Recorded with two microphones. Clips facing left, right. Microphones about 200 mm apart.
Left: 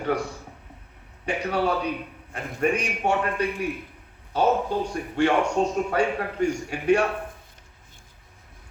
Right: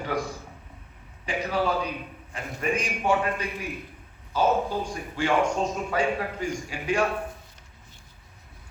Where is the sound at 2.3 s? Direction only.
60° left (ahead or behind).